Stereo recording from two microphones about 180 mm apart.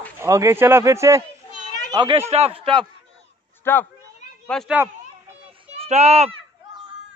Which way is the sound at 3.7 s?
10° left (ahead or behind).